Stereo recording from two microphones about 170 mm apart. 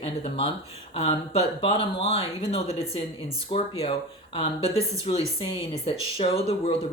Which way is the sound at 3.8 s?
35° left (ahead or behind).